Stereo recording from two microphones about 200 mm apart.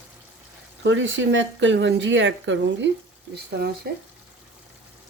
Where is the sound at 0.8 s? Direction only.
70° right (ahead or behind).